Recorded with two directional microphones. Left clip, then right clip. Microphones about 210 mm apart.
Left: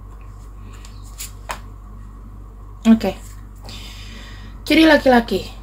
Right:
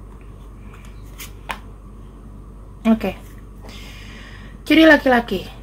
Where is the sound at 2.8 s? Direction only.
10° right (ahead or behind).